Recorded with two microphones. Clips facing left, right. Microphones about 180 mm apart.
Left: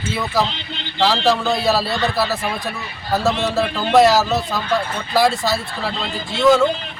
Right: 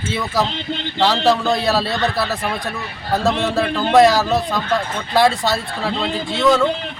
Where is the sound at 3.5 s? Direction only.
Centre (ahead or behind).